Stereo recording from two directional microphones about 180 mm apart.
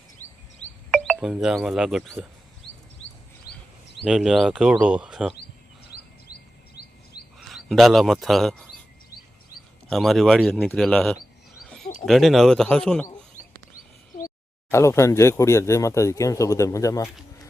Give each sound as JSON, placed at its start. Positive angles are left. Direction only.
{"t": 0.2, "sound": "a sound", "side_deg": 10}
{"t": 0.9, "sound": "speech", "side_deg": 0}
{"t": 4.0, "sound": "speech", "side_deg": 0}
{"t": 7.4, "sound": "speech", "side_deg": 0}
{"t": 9.9, "sound": "speech", "side_deg": 0}
{"t": 11.6, "sound": "a sound", "side_deg": 0}
{"t": 12.0, "sound": "speech", "side_deg": 0}
{"t": 13.7, "sound": "a sound", "side_deg": 50}
{"t": 14.7, "sound": "speech", "side_deg": 15}